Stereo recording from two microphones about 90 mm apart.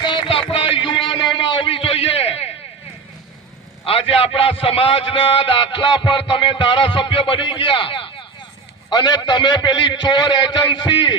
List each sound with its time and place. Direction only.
0.0 s a sound: 65° left (ahead or behind); by 2.5 s 90° left
3.8 s a man's voice: 90° left; by 8.1 s 70° left (ahead or behind)
8.9 s a man's voice: 50° left (ahead or behind)